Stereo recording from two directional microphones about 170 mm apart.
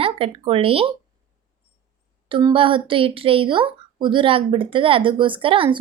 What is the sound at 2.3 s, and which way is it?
A woman's voice, 25° right (ahead or behind).